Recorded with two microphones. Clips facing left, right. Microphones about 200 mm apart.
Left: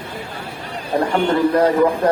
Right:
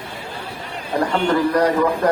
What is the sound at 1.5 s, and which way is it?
Speech, 25° left (ahead or behind).